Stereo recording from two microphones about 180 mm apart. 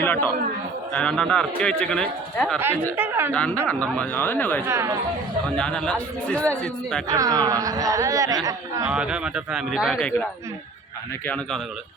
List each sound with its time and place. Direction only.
0.0 s a man's voice: 10° left (ahead or behind)
2.9 s a woman's voice: 10° right (ahead or behind)
3.3 s speech: 5° left (ahead or behind)
4.6 s a woman's voice: 15° right (ahead or behind)
5.5 s speech: 5° left (ahead or behind)
7.1 s a woman's voice: 20° right (ahead or behind)
8.9 s speech: 5° right (ahead or behind)